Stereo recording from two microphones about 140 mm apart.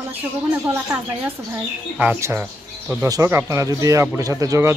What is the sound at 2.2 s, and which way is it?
Speech, 15° right (ahead or behind).